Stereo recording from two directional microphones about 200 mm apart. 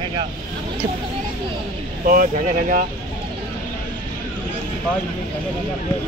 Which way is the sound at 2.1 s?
45° right (ahead or behind).